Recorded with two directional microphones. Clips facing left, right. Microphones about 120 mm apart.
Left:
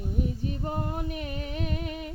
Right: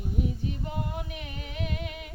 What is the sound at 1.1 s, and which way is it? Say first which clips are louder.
Music: left 4 dB; 40° left (ahead or behind).